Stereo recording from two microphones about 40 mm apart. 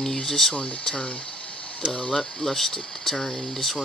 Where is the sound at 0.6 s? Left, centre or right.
Left.